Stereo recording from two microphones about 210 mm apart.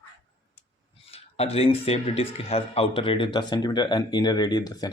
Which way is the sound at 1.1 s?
30° left (ahead or behind).